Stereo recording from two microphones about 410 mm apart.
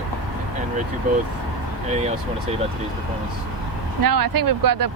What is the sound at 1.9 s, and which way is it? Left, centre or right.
Speech, centre.